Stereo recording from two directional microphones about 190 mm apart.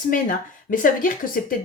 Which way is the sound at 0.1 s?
45° left (ahead or behind).